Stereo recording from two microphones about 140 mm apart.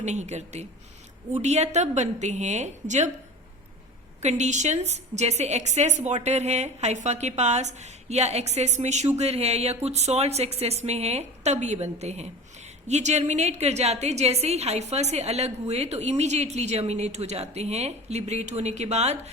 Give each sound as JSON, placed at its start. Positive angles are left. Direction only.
{"t": 0.0, "sound": "a woman's voice", "side_deg": -55}
{"t": 4.2, "sound": "a woman's voice", "side_deg": -55}